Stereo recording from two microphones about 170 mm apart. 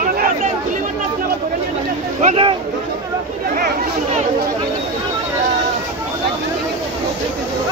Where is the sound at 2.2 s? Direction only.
35° right (ahead or behind).